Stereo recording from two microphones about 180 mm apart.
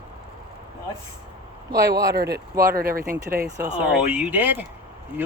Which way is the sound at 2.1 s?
60° right (ahead or behind).